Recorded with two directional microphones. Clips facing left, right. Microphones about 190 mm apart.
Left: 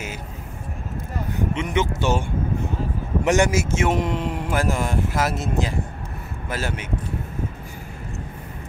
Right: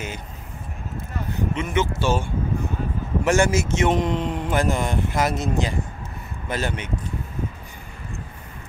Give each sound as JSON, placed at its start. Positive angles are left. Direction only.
{"t": 1.5, "sound": "speech", "side_deg": 20}
{"t": 3.3, "sound": "speech", "side_deg": 15}